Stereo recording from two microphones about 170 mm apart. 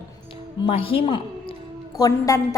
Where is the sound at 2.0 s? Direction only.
20° left (ahead or behind).